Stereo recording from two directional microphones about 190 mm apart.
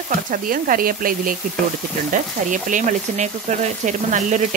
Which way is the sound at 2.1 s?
40° right (ahead or behind).